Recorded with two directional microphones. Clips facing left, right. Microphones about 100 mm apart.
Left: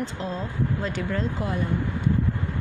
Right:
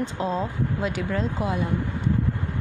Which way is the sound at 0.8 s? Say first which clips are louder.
Right 2 dB; 5° right (ahead or behind).